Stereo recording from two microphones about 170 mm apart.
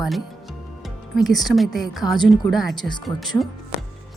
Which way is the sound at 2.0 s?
25° left (ahead or behind).